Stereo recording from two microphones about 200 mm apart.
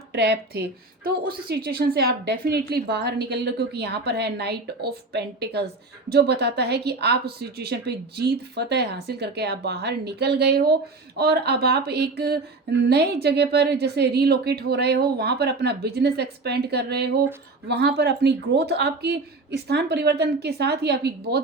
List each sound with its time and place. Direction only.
0.1 s a woman's voice: 55° right (ahead or behind)